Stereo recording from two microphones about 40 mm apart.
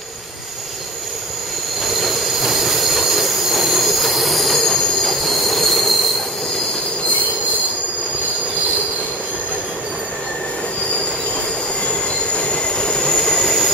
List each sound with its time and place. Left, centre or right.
1.9 s train wheels squealing: centre
12.4 s train wheels squealing: left; by 13.7 s centre